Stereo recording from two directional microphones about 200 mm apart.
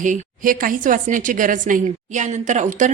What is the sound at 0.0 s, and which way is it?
A woman's voice, 40° right (ahead or behind).